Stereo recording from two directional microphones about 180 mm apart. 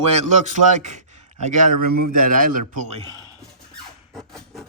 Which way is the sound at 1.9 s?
55° right (ahead or behind).